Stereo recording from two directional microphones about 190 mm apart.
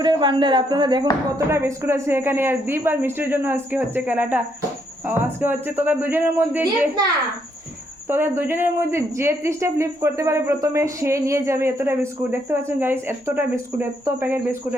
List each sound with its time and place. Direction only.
0.0 s a woman's voice: 25° right (ahead or behind)
8.0 s a woman's voice: 10° right (ahead or behind)